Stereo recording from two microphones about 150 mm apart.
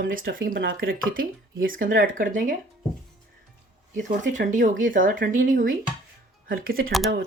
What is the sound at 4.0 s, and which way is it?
Speech, 60° right (ahead or behind).